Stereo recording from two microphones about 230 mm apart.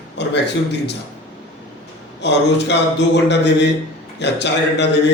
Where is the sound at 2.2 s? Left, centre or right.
Left.